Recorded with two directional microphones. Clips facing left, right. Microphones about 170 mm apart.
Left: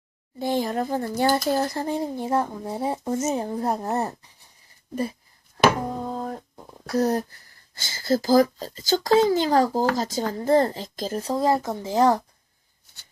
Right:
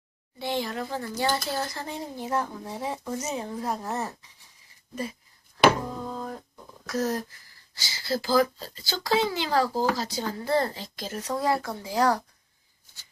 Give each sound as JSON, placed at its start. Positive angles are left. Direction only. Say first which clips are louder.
{"t": 0.3, "sound": "speech", "louder": "left 6 dB", "side_deg": 45}
{"t": 2.1, "sound": "speech", "louder": "left 5 dB", "side_deg": 30}
{"t": 3.2, "sound": "speech", "louder": "left 6 dB", "side_deg": 40}
{"t": 5.5, "sound": "a sound", "louder": "left 1 dB", "side_deg": 40}
{"t": 6.8, "sound": "speech", "louder": "left 5 dB", "side_deg": 35}
{"t": 7.8, "sound": "speech", "louder": "left 6 dB", "side_deg": 50}